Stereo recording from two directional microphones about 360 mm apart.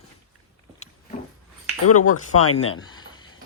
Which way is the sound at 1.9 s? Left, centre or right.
Left.